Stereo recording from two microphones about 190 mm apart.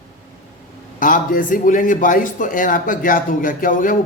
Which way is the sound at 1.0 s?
45° left (ahead or behind).